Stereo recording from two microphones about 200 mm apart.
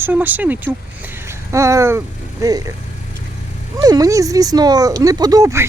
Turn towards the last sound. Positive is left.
turn(degrees=-15)  # may be behind; listen again after turning